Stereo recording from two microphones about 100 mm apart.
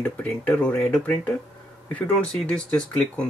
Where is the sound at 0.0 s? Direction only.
10° left (ahead or behind).